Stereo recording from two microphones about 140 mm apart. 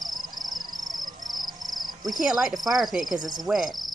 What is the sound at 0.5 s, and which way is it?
Insect, 30° right (ahead or behind).